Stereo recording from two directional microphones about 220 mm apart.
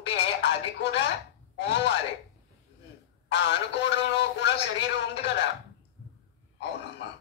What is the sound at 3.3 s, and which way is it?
Speech, 50° left (ahead or behind).